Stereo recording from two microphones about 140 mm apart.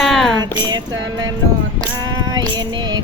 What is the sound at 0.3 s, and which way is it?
Music, 30° right (ahead or behind).